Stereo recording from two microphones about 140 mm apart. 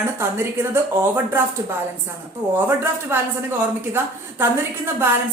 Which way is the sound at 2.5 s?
15° right (ahead or behind).